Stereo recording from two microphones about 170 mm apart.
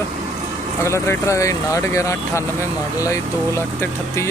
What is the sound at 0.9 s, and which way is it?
Speech, 15° left (ahead or behind).